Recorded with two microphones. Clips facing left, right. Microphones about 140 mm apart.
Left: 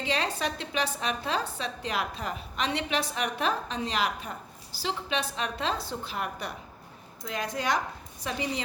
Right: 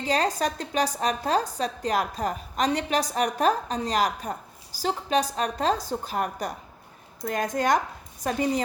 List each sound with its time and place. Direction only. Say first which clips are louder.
0.0 s a woman's voice: right 5 dB; 40° right (ahead or behind)